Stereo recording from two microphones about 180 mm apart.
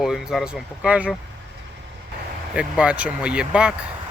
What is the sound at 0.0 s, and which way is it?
Speech, centre (ahead or behind).